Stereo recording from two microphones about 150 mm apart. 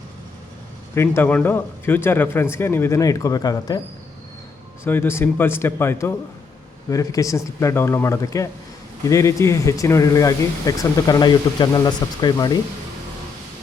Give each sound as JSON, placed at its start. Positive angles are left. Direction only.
{"t": 0.9, "sound": "a man's voice", "side_deg": 15}
{"t": 4.8, "sound": "a man's voice", "side_deg": 15}